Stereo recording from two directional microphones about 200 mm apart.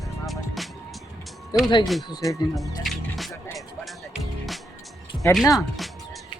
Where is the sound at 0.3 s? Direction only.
Centre (ahead or behind).